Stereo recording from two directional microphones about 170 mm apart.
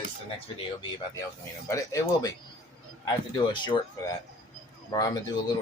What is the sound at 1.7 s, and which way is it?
Speech, 20° left (ahead or behind).